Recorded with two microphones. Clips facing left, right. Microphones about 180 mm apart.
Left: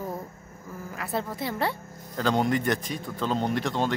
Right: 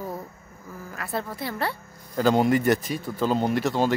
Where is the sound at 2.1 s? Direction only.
5° right (ahead or behind).